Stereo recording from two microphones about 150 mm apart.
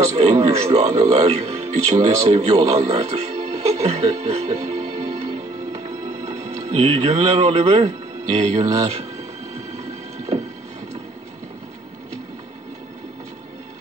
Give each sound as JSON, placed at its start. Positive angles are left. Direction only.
{"t": 0.1, "sound": "speech", "side_deg": -45}
{"t": 2.5, "sound": "music", "side_deg": -40}